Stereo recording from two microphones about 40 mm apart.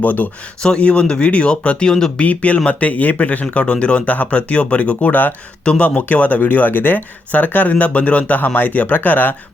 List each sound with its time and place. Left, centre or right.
0.0 s speech: left
0.8 s speech: left
1.8 s speech: centre
2.1 s speech: left
5.0 s speech: left
5.6 s speech: left
8.4 s speech: left